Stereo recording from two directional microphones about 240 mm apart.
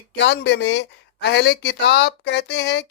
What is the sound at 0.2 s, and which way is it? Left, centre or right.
Speech, left.